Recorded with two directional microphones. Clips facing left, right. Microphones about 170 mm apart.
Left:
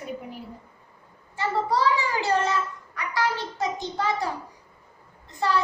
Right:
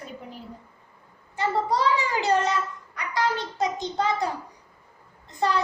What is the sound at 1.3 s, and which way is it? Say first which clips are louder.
A child's voice: even; 20° right (ahead or behind).